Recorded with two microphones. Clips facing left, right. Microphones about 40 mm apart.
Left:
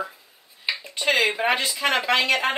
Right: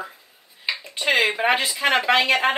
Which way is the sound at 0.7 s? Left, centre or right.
Centre.